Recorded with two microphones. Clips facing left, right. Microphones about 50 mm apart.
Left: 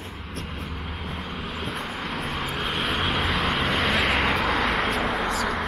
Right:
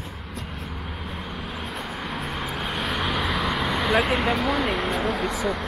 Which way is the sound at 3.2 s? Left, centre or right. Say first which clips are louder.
Even; left.